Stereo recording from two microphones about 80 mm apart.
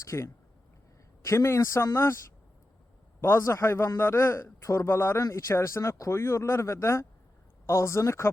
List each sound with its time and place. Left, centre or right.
0.0 s a man's voice: left
3.2 s a man's voice: left